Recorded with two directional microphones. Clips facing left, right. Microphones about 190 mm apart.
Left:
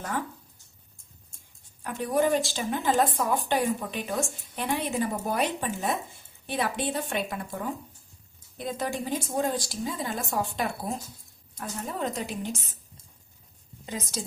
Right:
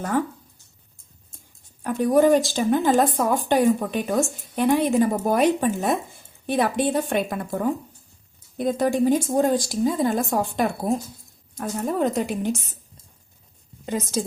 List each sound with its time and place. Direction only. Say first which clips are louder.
1.8 s a woman's voice: right 8 dB; 45° right (ahead or behind)
13.8 s a woman's voice: right 8 dB; 50° right (ahead or behind)